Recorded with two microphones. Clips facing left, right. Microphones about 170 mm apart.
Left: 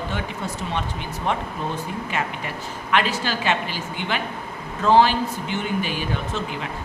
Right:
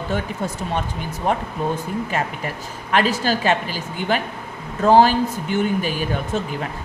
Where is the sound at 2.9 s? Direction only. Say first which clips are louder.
Right 4 dB; 40° right (ahead or behind).